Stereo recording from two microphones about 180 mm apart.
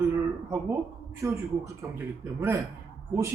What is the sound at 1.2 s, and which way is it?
Speech, 15° right (ahead or behind).